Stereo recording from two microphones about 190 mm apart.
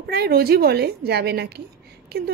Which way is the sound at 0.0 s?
55° right (ahead or behind).